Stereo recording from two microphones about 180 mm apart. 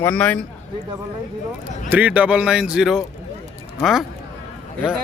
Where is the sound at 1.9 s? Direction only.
10° right (ahead or behind).